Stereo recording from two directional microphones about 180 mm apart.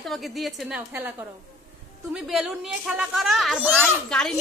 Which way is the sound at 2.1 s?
5° right (ahead or behind).